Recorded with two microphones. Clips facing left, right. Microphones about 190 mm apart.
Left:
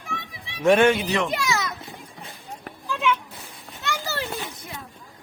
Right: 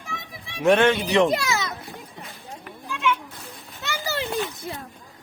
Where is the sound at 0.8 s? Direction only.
10° left (ahead or behind).